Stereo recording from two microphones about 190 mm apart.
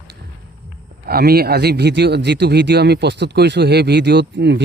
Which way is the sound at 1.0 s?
55° right (ahead or behind).